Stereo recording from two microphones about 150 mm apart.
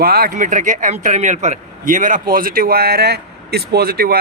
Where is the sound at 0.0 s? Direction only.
90° right.